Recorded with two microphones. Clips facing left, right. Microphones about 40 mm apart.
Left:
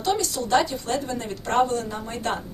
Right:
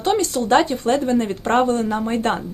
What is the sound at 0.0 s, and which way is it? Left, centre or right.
Speech, right.